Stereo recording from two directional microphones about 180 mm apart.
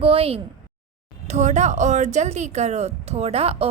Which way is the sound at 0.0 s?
30° right (ahead or behind).